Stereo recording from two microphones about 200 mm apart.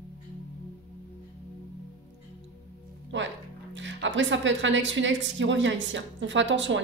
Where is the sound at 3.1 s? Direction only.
70° right (ahead or behind).